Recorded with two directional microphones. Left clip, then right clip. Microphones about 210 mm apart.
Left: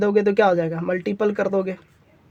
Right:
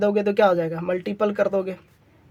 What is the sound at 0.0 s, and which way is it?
Speech, 25° left (ahead or behind).